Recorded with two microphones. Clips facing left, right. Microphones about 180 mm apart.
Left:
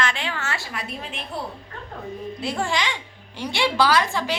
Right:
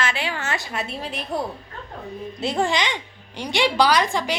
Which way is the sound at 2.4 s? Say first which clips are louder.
Right 4 dB; 20° right (ahead or behind).